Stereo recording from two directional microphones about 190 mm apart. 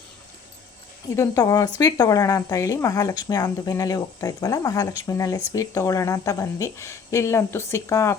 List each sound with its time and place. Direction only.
1.1 s speech: 15° left (ahead or behind)